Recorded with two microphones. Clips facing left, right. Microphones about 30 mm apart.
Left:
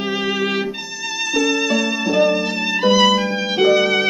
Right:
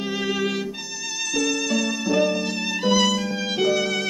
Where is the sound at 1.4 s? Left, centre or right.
Centre.